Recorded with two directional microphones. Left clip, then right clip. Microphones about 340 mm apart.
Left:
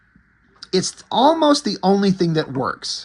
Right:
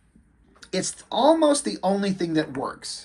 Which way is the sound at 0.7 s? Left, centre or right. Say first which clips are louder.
Left 7 dB; centre.